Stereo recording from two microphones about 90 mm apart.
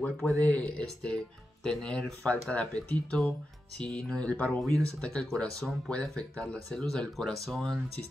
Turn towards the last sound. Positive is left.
turn(degrees=5)  # may be behind; listen again after turning